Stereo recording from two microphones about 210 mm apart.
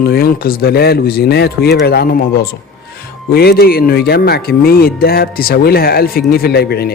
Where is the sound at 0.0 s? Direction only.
45° left (ahead or behind).